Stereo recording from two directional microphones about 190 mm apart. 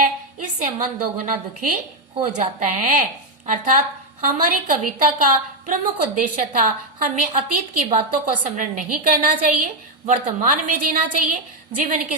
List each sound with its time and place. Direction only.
0.0 s a woman's voice: 40° right (ahead or behind)